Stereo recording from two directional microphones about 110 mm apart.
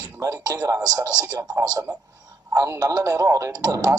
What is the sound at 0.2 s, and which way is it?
A man's voice, 30° right (ahead or behind).